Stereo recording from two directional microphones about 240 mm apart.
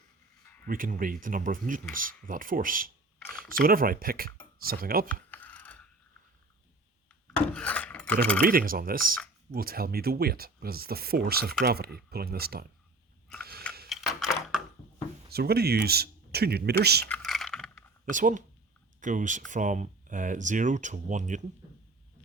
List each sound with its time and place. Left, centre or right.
0.6 s speech: right
5.3 s a sound: centre
7.3 s wood: centre
8.2 s speech: centre
8.4 s speech: right
13.4 s biting: right
13.9 s typing: centre
15.3 s speech: right
17.1 s a sound: centre
18.0 s speech: right